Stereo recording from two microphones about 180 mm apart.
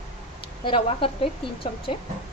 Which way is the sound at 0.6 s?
30° left (ahead or behind).